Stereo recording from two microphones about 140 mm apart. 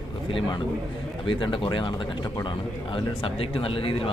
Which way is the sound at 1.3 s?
35° left (ahead or behind).